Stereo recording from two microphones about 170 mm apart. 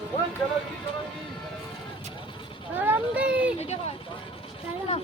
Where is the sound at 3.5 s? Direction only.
40° left (ahead or behind).